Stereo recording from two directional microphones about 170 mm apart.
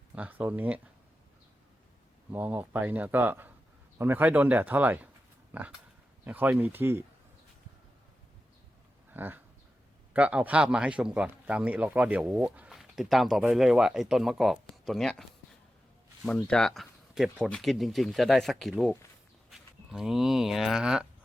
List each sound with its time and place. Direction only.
0.2 s speech: 10° right (ahead or behind)
2.3 s speech: 10° right (ahead or behind)
9.1 s a sound: 10° right (ahead or behind)
10.1 s speech: 10° right (ahead or behind)
16.2 s speech: 5° left (ahead or behind)